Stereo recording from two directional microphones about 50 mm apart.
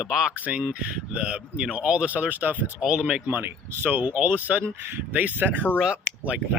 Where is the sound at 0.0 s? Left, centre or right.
Centre.